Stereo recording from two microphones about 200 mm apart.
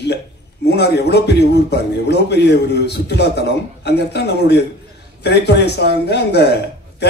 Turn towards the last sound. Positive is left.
turn(degrees=55)  # may be behind; listen again after turning